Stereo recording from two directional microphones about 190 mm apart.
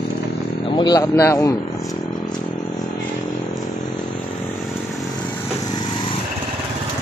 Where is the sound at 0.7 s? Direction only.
20° left (ahead or behind).